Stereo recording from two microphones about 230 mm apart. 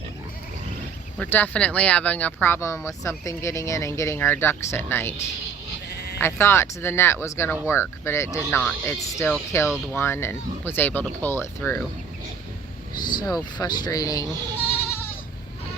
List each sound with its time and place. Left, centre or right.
1.2 s speech: centre
5.9 s sheep: left
6.1 s speech: centre
13.1 s speech: centre